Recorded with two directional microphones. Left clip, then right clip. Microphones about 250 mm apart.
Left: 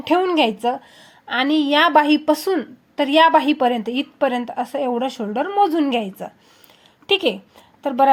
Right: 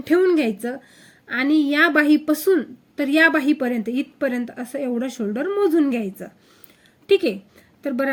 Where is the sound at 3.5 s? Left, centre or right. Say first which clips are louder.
Left 4 dB; left.